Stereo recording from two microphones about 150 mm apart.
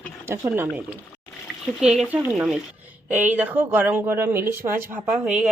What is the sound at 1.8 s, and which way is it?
Speech, 5° right (ahead or behind).